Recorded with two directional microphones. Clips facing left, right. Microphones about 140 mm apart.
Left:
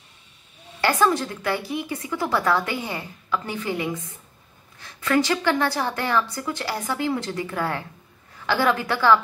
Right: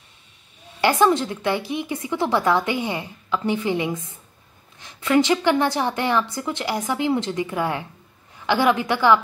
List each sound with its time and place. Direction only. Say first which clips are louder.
0.7 s a woman's voice: right 3 dB; 20° right (ahead or behind)